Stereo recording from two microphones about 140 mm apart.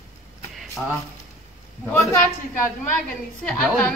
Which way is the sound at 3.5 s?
10° left (ahead or behind).